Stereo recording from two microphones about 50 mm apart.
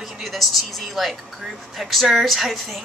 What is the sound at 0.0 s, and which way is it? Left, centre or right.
A woman's voice, centre.